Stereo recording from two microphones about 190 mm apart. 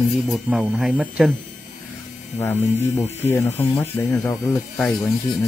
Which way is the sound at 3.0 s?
10° left (ahead or behind).